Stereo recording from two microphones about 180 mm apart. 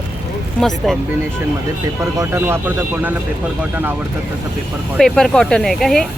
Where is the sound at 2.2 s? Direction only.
15° right (ahead or behind).